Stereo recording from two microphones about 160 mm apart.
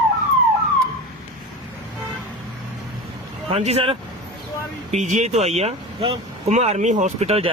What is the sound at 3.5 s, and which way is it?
Speech, 40° right (ahead or behind).